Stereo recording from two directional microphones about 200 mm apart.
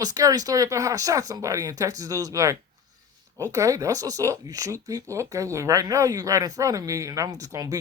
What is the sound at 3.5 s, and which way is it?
Speech, 15° right (ahead or behind).